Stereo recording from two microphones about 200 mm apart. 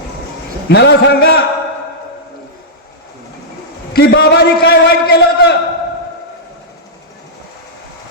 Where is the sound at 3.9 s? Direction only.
65° left (ahead or behind).